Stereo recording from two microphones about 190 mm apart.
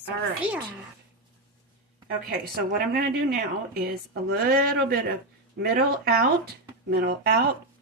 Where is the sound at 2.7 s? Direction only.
50° right (ahead or behind).